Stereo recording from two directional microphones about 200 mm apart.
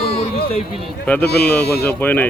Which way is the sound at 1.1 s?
10° left (ahead or behind).